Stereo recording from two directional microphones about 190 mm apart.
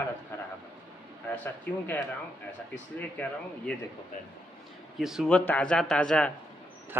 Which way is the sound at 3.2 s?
10° left (ahead or behind).